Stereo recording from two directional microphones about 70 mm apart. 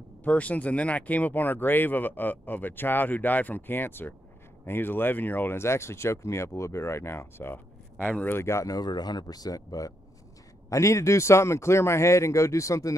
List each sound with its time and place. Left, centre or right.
0.2 s speech: left
8.4 s speech: left
8.6 s speech: left